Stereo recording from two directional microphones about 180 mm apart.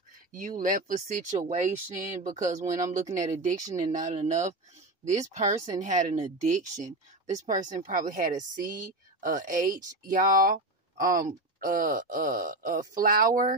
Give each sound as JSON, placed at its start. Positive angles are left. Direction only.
{"t": 0.3, "sound": "speech", "side_deg": -45}